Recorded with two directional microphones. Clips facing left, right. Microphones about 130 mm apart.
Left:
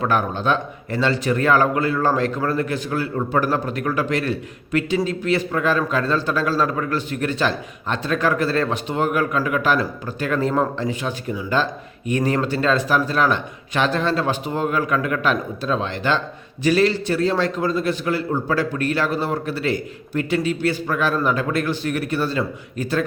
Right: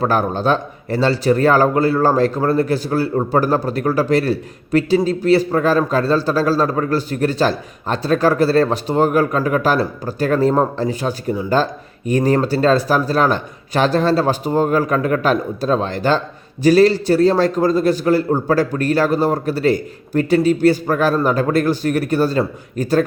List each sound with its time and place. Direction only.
0.0 s a man's voice: 35° right (ahead or behind)